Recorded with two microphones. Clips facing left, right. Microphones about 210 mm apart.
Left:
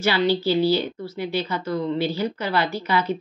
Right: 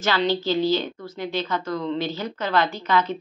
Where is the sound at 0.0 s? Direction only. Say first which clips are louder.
Left 2 dB; 10° left (ahead or behind).